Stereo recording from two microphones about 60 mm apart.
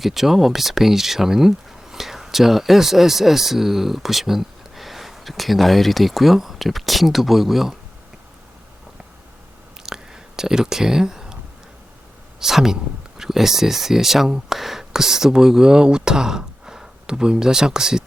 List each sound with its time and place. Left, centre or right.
0.0 s speech: centre
9.8 s a sound: centre
12.4 s speech: centre